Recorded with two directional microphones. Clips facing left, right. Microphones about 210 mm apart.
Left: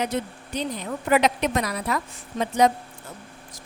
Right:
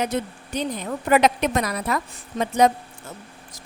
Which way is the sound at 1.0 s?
50° right (ahead or behind).